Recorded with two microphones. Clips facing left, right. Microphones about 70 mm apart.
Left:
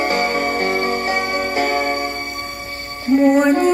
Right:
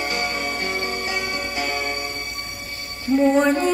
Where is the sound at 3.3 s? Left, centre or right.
Centre.